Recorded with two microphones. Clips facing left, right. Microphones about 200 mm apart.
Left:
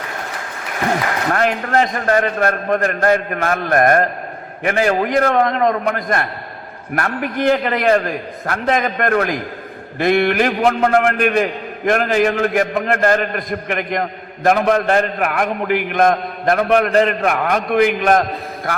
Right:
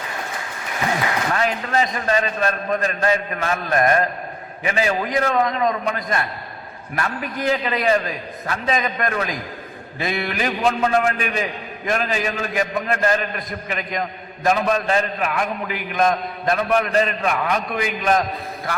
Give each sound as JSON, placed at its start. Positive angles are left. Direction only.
{"t": 0.9, "sound": "a man's voice", "side_deg": 55}